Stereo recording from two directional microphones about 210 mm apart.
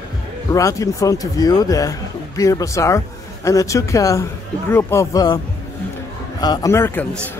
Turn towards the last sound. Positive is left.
turn(degrees=10)  # may be behind; listen again after turning